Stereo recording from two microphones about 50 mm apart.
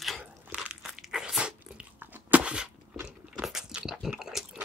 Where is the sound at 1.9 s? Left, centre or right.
Right.